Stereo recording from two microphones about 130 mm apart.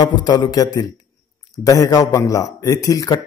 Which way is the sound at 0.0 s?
35° left (ahead or behind).